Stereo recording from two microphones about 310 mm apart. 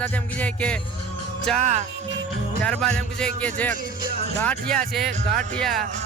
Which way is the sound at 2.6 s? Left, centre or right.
Centre.